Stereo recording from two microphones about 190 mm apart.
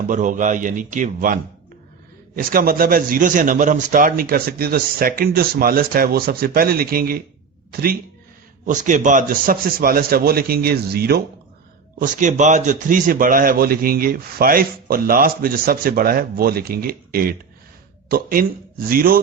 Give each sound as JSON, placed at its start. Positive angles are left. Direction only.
{"t": 0.1, "sound": "a man's voice", "side_deg": -40}
{"t": 11.9, "sound": "a man's voice", "side_deg": -40}